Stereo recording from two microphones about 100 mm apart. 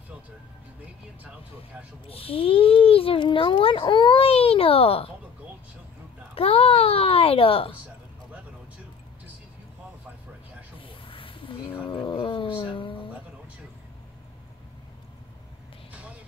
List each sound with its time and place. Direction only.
2.0 s a child's voice: 70° left (ahead or behind)
6.3 s a child's voice: 75° left (ahead or behind)
10.9 s snake: 60° left (ahead or behind)
11.9 s wild animals: 60° left (ahead or behind)